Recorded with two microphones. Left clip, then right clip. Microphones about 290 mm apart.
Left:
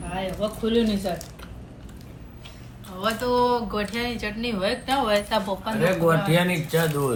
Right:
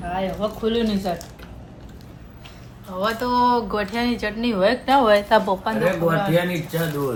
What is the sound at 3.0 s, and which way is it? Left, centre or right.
Speech, right.